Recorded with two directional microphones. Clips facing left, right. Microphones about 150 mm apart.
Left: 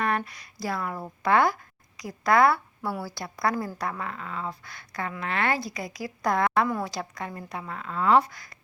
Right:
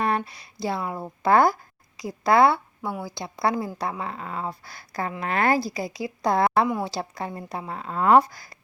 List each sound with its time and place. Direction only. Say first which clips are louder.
0.3 s speech: right 3 dB; 30° right (ahead or behind)
1.2 s a woman's voice: right 3 dB; 35° right (ahead or behind)